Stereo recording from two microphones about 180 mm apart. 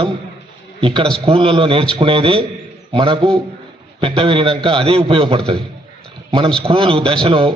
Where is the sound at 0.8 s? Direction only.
30° right (ahead or behind).